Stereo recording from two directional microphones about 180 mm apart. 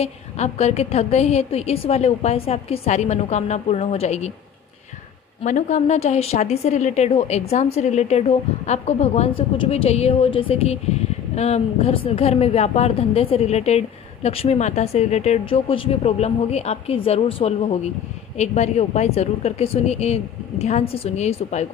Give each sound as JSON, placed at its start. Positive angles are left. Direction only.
{"t": 0.0, "sound": "a woman's voice", "side_deg": 35}
{"t": 5.4, "sound": "a woman's voice", "side_deg": 40}